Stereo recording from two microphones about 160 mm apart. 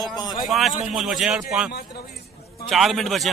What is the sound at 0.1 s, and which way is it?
Speech, 25° left (ahead or behind).